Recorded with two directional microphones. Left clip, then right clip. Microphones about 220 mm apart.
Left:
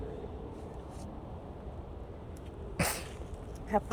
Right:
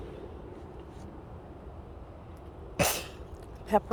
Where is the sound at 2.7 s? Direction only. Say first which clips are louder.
Right 6 dB; 35° right (ahead or behind).